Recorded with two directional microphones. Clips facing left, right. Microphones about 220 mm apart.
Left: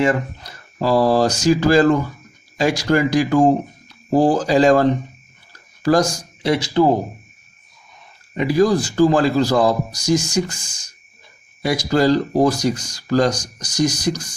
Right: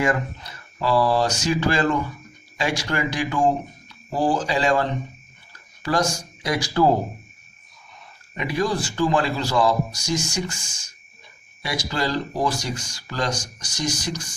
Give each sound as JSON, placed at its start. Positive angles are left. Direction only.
{"t": 0.0, "sound": "speech", "side_deg": 35}
{"t": 8.3, "sound": "speech", "side_deg": 35}